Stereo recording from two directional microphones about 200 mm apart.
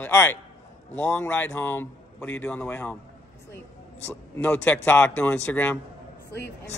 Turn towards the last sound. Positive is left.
turn(degrees=5)  # may be behind; listen again after turning